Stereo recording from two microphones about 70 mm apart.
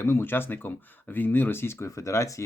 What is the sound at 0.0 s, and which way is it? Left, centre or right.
Speech, left.